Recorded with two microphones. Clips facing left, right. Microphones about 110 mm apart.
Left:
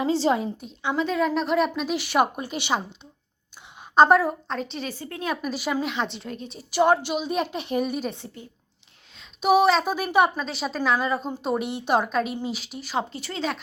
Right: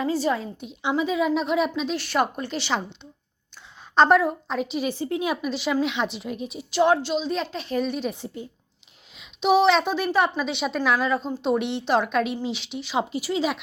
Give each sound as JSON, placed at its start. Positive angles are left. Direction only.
{"t": 0.0, "sound": "a woman's voice", "side_deg": 25}
{"t": 0.9, "sound": "a woman's voice", "side_deg": -5}
{"t": 4.9, "sound": "speech", "side_deg": -20}
{"t": 5.3, "sound": "a woman's voice", "side_deg": 0}
{"t": 6.1, "sound": "speech", "side_deg": -15}
{"t": 6.7, "sound": "a woman's voice", "side_deg": 10}
{"t": 8.1, "sound": "speech", "side_deg": -15}
{"t": 9.4, "sound": "a woman's voice", "side_deg": 10}
{"t": 10.3, "sound": "a woman's voice", "side_deg": 0}
{"t": 11.4, "sound": "a woman's voice", "side_deg": 5}
{"t": 13.1, "sound": "speech", "side_deg": -10}